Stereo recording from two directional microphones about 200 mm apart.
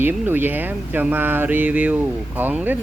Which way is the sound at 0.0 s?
10° right (ahead or behind).